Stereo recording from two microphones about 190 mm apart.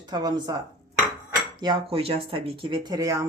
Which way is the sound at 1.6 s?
25° right (ahead or behind).